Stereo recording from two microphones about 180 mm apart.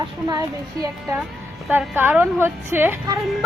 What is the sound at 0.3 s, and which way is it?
A child's voice, 20° right (ahead or behind).